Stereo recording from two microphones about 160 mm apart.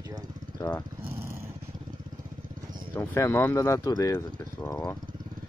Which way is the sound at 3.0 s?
15° left (ahead or behind).